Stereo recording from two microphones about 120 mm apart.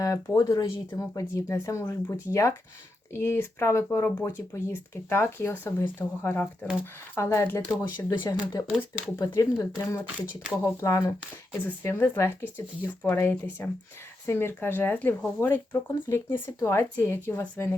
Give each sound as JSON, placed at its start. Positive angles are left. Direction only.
{"t": 0.0, "sound": "speech", "side_deg": 25}